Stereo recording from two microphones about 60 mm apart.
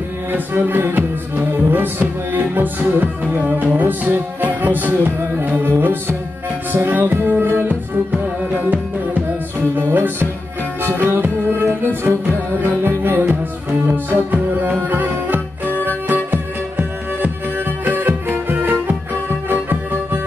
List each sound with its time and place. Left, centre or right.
0.3 s music: right
9.8 s music: right
11.0 s tabla: right
12.0 s music: right
13.8 s music: right